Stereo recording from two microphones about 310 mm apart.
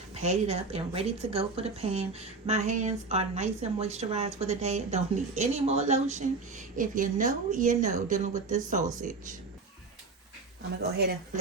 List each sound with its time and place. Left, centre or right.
0.1 s speech: centre
10.9 s speech: right